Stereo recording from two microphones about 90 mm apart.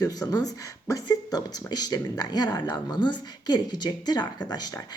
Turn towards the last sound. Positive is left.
turn(degrees=50)  # may be behind; listen again after turning